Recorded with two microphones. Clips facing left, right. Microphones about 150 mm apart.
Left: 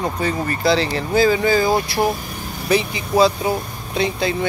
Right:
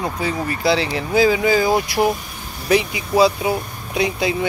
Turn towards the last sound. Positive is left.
turn(degrees=-10)  # may be behind; listen again after turning